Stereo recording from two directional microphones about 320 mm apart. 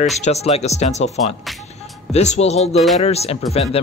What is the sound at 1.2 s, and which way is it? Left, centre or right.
Speech, centre.